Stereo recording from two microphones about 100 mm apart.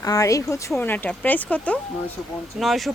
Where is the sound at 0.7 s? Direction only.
20° left (ahead or behind).